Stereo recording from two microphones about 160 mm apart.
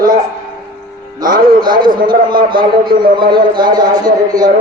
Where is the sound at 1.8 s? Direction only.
30° right (ahead or behind).